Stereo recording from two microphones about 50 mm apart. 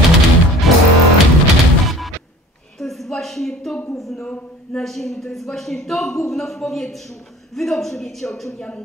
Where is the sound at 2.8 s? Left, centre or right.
Centre.